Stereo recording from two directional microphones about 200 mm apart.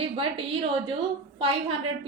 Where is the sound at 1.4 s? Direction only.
30° right (ahead or behind).